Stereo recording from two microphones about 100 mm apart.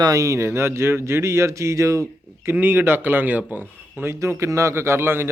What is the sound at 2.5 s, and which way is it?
A man's voice, 20° right (ahead or behind).